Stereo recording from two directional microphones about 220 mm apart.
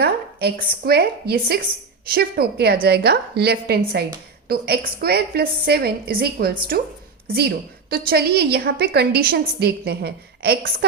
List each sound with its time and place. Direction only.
0.0 s a woman's voice: 45° right (ahead or behind)